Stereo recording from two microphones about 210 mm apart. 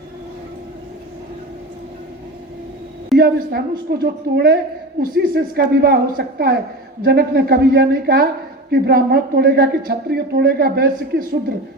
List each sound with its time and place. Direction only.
3.2 s a man's voice: 45° right (ahead or behind)